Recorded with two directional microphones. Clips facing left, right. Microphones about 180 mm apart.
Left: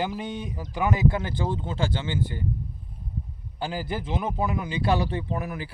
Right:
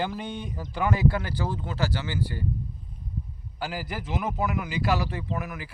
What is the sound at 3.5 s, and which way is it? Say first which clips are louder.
Speech: left 3 dB; 25° left (ahead or behind).